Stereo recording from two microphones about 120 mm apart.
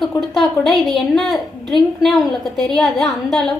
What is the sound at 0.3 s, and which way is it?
A woman's voice, centre (ahead or behind).